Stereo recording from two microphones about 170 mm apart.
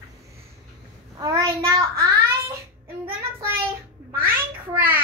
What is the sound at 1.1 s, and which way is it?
Child singing, 20° right (ahead or behind).